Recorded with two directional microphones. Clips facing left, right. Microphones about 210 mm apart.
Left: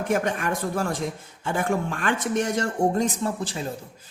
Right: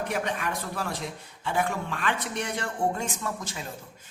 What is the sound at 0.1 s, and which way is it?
A man's voice, 45° left (ahead or behind).